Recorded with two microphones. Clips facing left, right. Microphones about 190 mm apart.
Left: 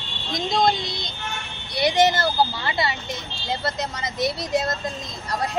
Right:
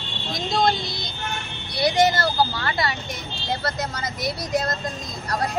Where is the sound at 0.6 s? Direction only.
20° left (ahead or behind).